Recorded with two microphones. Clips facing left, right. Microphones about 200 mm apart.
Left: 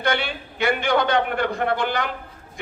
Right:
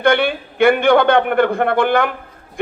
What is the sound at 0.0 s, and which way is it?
A man's voice, 55° right (ahead or behind).